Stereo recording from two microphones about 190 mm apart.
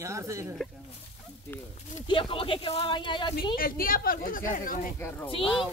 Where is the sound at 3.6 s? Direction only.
50° left (ahead or behind).